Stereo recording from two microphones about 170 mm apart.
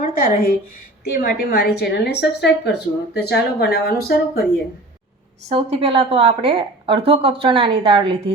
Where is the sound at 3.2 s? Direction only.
70° left (ahead or behind).